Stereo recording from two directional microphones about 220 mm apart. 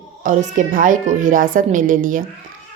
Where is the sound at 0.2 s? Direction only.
35° right (ahead or behind).